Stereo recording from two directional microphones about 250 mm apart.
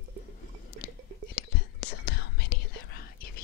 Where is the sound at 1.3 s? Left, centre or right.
Left.